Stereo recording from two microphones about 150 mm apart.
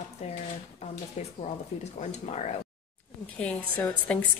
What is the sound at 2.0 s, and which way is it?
Speech, 50° left (ahead or behind).